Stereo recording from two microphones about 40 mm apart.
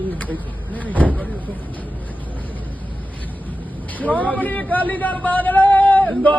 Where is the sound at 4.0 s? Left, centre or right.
Right.